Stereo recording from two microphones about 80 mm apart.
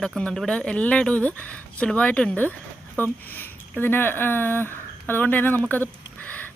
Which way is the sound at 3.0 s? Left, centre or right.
Left.